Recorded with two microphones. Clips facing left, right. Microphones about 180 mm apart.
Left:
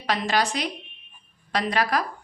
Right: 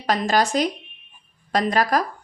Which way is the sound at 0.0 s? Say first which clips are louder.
Right 4 dB; 45° right (ahead or behind).